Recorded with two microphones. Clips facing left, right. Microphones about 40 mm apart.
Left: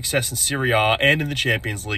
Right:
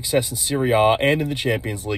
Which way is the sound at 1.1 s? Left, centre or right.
Left.